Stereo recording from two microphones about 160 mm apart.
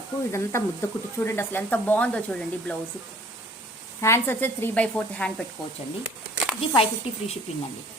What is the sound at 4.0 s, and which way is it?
A woman's voice, 15° left (ahead or behind).